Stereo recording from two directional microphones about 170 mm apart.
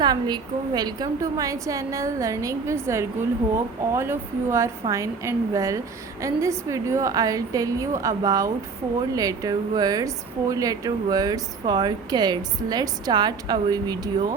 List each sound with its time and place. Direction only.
0.0 s a woman's voice: 25° right (ahead or behind)